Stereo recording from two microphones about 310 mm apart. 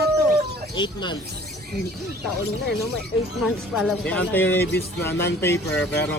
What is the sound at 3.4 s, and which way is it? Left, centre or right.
Speech, centre.